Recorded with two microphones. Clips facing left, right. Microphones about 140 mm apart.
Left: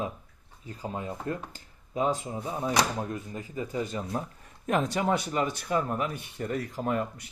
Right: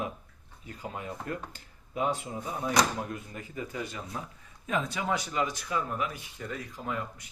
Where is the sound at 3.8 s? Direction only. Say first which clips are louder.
Left 6 dB; 40° left (ahead or behind).